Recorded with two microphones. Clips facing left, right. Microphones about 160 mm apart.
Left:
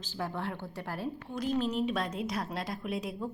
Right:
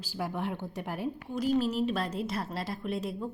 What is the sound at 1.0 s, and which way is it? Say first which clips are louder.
A woman's voice: right 3 dB; 5° right (ahead or behind).